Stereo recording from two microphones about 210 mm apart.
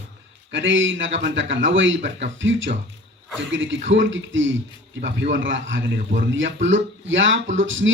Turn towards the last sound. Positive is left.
turn(degrees=-65)  # may be behind; listen again after turning